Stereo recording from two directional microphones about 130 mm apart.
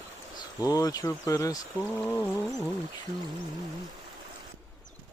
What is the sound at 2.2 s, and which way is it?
Speech, 20° left (ahead or behind).